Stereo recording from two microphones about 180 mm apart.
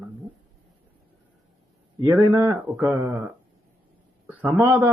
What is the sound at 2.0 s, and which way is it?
Speech, 15° right (ahead or behind).